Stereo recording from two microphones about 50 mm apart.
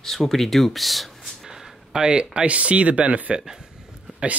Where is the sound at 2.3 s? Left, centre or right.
Right.